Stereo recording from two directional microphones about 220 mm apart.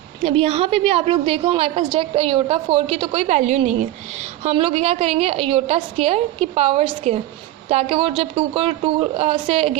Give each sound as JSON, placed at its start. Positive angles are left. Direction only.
{"t": 0.2, "sound": "a woman's voice", "side_deg": -25}